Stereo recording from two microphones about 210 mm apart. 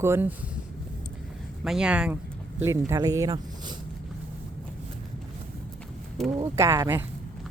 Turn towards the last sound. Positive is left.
turn(degrees=-15)  # may be behind; listen again after turning